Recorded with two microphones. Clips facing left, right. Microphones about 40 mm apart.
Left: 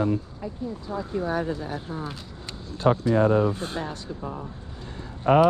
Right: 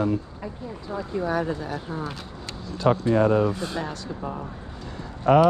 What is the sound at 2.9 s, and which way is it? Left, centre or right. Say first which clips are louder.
Speech: right 1 dB; right.